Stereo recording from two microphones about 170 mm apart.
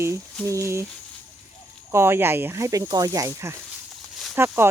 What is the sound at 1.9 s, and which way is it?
Speech, 15° right (ahead or behind).